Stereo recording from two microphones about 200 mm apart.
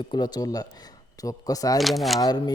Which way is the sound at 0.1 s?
20° left (ahead or behind).